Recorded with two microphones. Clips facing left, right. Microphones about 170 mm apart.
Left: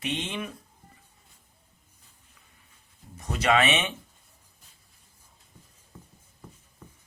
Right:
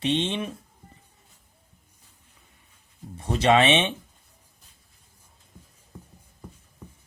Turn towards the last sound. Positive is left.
turn(degrees=-10)  # may be behind; listen again after turning